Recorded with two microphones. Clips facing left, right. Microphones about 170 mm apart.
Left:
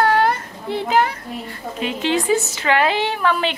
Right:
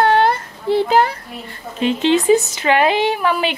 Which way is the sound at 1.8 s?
25° right (ahead or behind).